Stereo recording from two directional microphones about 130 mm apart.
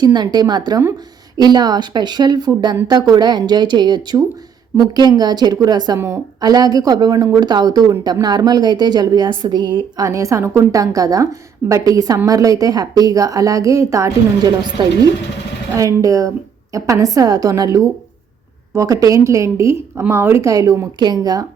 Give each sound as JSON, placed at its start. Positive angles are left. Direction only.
{"t": 0.0, "sound": "a woman's voice", "side_deg": -35}